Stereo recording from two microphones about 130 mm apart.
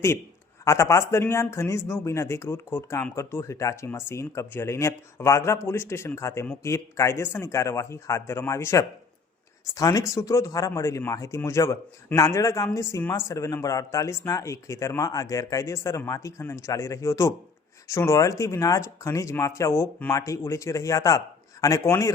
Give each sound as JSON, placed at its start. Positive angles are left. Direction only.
{"t": 0.6, "sound": "speech", "side_deg": 20}